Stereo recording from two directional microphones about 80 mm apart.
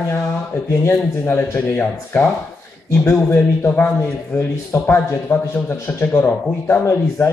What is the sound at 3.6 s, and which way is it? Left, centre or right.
A man's voice, left.